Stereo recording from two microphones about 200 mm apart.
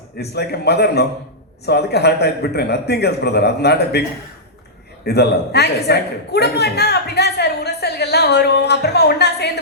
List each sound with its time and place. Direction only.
0.2 s a man's voice: 55° left (ahead or behind)
5.0 s a man's voice: 55° left (ahead or behind)